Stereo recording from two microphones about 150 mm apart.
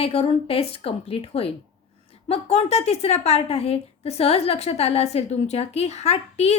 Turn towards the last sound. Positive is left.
turn(degrees=45)  # may be behind; listen again after turning